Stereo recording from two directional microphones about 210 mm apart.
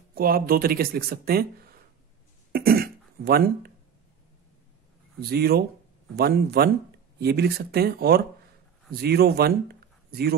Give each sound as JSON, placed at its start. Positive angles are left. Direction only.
{"t": 0.1, "sound": "speech", "side_deg": -45}
{"t": 2.5, "sound": "cough", "side_deg": -45}
{"t": 5.3, "sound": "speech", "side_deg": -50}